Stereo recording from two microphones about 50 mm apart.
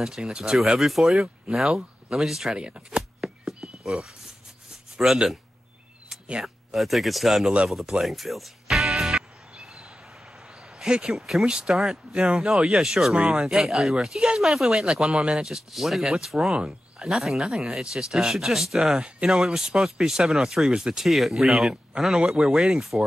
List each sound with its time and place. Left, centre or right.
0.0 s speech: centre
1.7 s a sound: centre
2.1 s speech: centre
2.5 s speech: centre
3.2 s a sound: centre
3.8 s speech: centre
6.4 s speech: centre
8.0 s music: centre
10.8 s speech: centre